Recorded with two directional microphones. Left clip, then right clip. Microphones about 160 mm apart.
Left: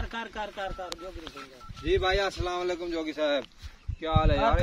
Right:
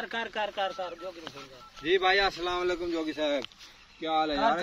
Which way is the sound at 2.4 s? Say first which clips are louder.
Right 1 dB; 75° left (ahead or behind).